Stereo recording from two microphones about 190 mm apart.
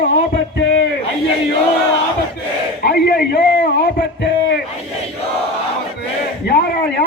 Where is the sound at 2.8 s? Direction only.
55° left (ahead or behind).